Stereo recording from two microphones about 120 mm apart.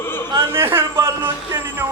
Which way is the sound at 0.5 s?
20° right (ahead or behind).